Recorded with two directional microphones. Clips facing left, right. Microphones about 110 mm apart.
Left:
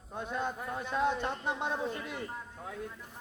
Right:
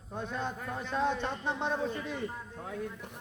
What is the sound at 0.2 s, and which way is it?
A man's voice, 10° left (ahead or behind).